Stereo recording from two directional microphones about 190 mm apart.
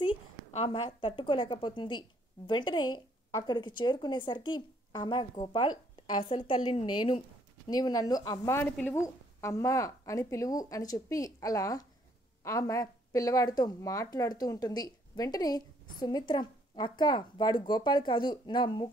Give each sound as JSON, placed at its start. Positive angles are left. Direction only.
{"t": 0.0, "sound": "a woman's voice", "side_deg": 30}